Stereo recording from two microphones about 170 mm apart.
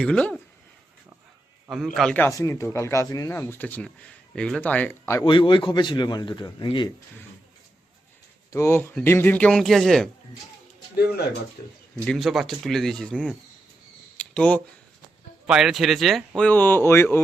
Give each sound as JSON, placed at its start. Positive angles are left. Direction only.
{"t": 0.0, "sound": "a man's voice", "side_deg": 5}
{"t": 1.7, "sound": "a man's voice", "side_deg": 0}
{"t": 5.2, "sound": "a man's voice", "side_deg": 30}
{"t": 8.5, "sound": "a man's voice", "side_deg": 15}
{"t": 12.0, "sound": "speech", "side_deg": 0}
{"t": 14.2, "sound": "camera", "side_deg": 5}
{"t": 15.4, "sound": "speech", "side_deg": -5}
{"t": 16.4, "sound": "a man's voice", "side_deg": 10}